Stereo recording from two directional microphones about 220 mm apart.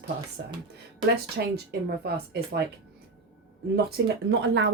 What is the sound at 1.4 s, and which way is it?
Speech, 45° right (ahead or behind).